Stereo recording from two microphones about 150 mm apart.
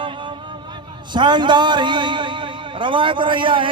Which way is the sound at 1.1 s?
30° right (ahead or behind).